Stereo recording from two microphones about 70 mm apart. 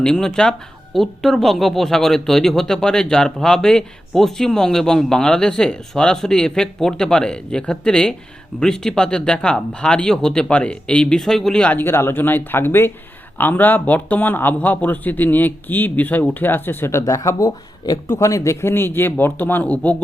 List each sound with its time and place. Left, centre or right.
0.0 s speech: centre
11.6 s speech: left
11.9 s speech: left
17.0 s speech: left; by 20.0 s centre